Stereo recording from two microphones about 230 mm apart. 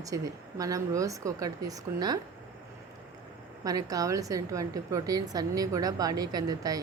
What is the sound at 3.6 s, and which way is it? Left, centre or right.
A woman's voice, centre.